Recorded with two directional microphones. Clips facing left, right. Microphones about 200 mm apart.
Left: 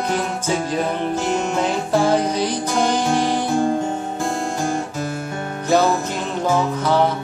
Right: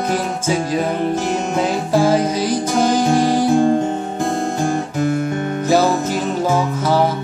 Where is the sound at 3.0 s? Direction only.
40° right (ahead or behind).